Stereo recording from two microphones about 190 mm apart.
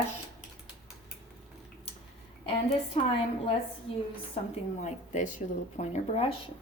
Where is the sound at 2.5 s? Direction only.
30° left (ahead or behind).